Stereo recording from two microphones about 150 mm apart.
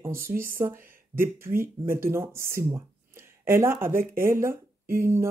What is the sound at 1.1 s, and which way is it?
Speech, 15° right (ahead or behind).